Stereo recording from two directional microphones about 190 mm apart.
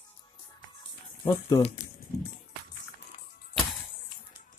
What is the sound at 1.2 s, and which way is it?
Speech, 25° left (ahead or behind).